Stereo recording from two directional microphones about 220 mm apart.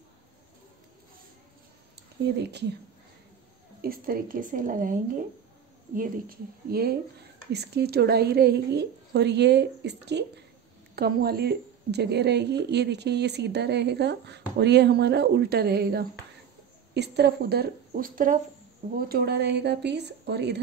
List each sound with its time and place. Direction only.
3.8 s a woman's voice: 40° right (ahead or behind)